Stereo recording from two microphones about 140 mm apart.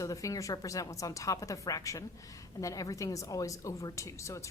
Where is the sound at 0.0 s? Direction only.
25° left (ahead or behind).